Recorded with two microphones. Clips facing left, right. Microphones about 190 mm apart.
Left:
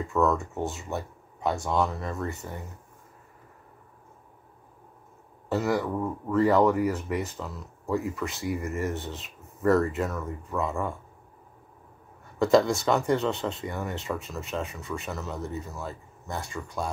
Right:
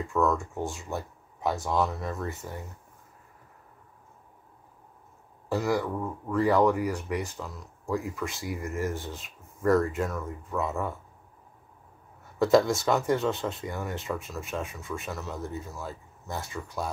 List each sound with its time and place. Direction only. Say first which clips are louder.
0.0 s speech: left 1 dB; centre (ahead or behind)
5.5 s speech: left 1 dB; centre (ahead or behind)
12.4 s speech: even; centre (ahead or behind)